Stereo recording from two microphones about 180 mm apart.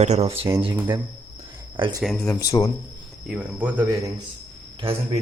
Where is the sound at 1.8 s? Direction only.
25° right (ahead or behind).